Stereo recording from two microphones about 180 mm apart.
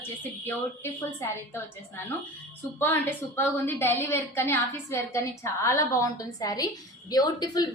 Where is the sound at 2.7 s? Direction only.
10° left (ahead or behind).